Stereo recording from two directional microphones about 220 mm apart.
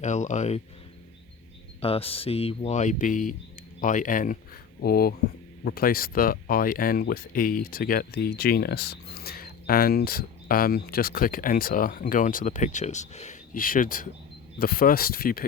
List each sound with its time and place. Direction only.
0.0 s speech: 35° left (ahead or behind)
1.8 s speech: 25° left (ahead or behind); by 15.4 s 45° left (ahead or behind)